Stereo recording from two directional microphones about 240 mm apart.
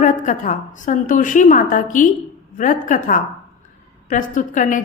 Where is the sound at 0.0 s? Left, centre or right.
Left.